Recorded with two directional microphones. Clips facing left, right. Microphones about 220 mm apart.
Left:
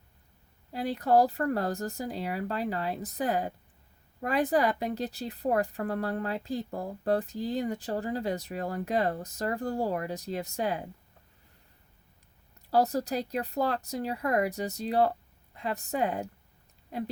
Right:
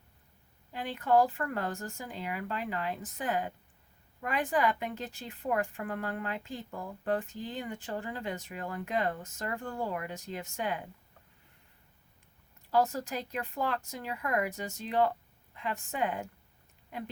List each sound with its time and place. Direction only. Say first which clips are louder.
0.7 s speech: left 3 dB; 35° left (ahead or behind)
12.7 s speech: left 3 dB; 40° left (ahead or behind)